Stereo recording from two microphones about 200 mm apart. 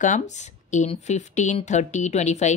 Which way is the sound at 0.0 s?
35° left (ahead or behind).